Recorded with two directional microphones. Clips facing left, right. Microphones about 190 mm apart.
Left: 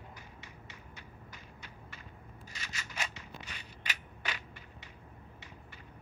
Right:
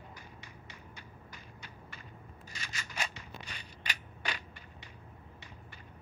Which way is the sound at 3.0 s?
35° right (ahead or behind).